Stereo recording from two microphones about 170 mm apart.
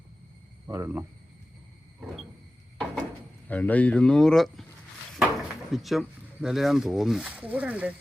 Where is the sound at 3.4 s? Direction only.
10° left (ahead or behind).